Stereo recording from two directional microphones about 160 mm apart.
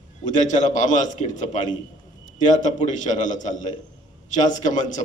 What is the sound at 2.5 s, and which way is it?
A man's voice, 50° left (ahead or behind).